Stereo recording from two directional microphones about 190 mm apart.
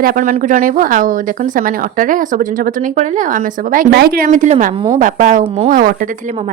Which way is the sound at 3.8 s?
55° right (ahead or behind).